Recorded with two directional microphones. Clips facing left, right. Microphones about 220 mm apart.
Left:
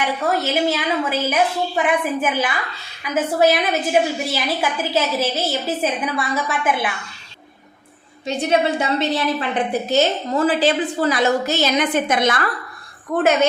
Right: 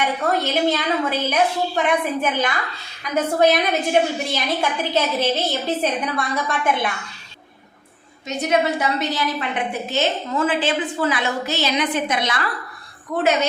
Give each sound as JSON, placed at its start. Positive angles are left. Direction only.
{"t": 0.0, "sound": "a woman's voice", "side_deg": 5}
{"t": 8.3, "sound": "a woman's voice", "side_deg": 30}